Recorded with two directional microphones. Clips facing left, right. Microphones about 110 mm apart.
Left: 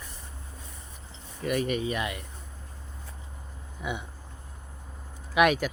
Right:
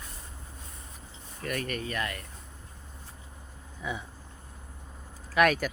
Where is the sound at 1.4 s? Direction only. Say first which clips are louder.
Left 6 dB; 5° left (ahead or behind).